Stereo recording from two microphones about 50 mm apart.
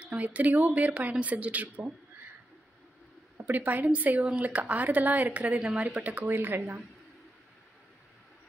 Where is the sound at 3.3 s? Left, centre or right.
Right.